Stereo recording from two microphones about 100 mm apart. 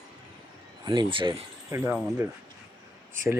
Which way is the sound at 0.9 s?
50° right (ahead or behind).